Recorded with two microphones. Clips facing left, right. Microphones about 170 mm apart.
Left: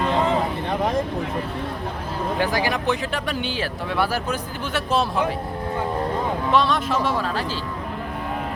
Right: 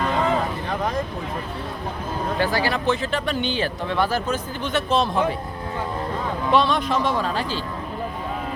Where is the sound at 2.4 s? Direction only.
15° left (ahead or behind).